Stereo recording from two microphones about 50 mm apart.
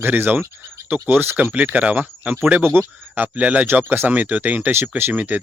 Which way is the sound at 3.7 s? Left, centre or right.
Right.